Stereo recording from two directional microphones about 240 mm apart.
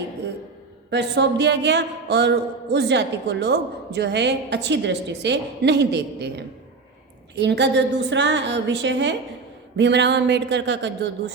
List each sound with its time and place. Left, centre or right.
0.9 s a woman's voice: right